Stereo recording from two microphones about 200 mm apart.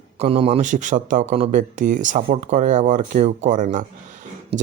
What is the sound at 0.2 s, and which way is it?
Speech, 30° right (ahead or behind).